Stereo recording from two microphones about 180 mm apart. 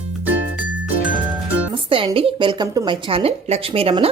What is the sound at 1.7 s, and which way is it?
A woman's voice, 30° right (ahead or behind).